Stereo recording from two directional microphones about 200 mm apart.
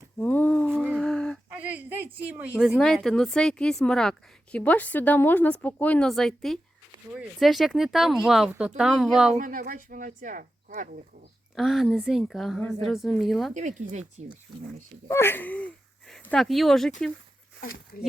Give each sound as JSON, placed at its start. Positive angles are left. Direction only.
{"t": 0.2, "sound": "a sound", "side_deg": 10}
{"t": 1.5, "sound": "a sound", "side_deg": -10}
{"t": 2.6, "sound": "speech", "side_deg": 0}
{"t": 9.3, "sound": "a woman's voice", "side_deg": -40}
{"t": 11.5, "sound": "speech", "side_deg": 0}
{"t": 13.5, "sound": "speech", "side_deg": -35}
{"t": 15.0, "sound": "speech", "side_deg": 10}